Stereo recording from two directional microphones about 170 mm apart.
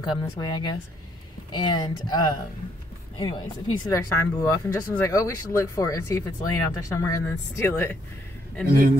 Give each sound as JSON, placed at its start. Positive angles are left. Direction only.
{"t": 0.2, "sound": "speech", "side_deg": 25}
{"t": 8.6, "sound": "a man's voice", "side_deg": -55}